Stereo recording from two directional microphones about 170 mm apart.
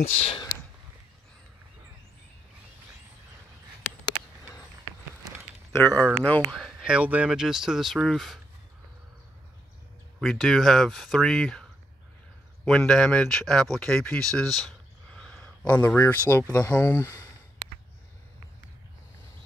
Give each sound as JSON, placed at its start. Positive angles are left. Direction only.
{"t": 0.1, "sound": "speech", "side_deg": 35}
{"t": 5.7, "sound": "speech", "side_deg": 15}
{"t": 10.2, "sound": "speech", "side_deg": 0}
{"t": 12.6, "sound": "speech", "side_deg": 5}